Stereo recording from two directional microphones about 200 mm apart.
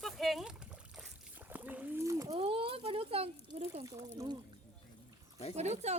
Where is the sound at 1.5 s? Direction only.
10° right (ahead or behind); by 3.8 s 30° right (ahead or behind).